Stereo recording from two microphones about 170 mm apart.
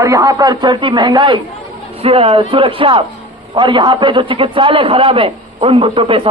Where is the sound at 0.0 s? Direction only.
20° right (ahead or behind).